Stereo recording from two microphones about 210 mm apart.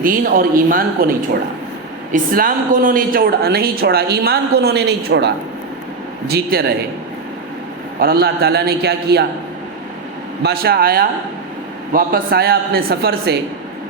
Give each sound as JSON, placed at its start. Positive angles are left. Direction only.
{"t": 0.0, "sound": "speech", "side_deg": -40}
{"t": 2.1, "sound": "speech", "side_deg": -40}
{"t": 7.9, "sound": "speech", "side_deg": -45}
{"t": 10.4, "sound": "speech", "side_deg": -50}